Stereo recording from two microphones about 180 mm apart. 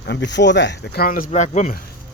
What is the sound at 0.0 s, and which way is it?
Speech, 75° left (ahead or behind).